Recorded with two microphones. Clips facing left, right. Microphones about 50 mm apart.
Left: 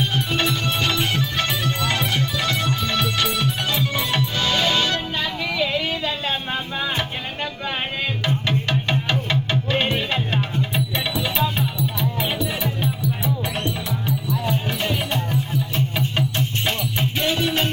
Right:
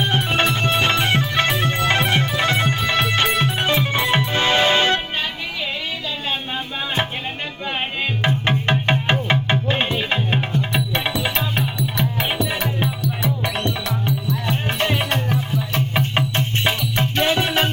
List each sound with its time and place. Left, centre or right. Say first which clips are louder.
0.0 s music: right 3 dB; right
8.2 s music: right 4 dB; right
11.8 s music: right 1 dB; right
16.1 s music: right 2 dB; right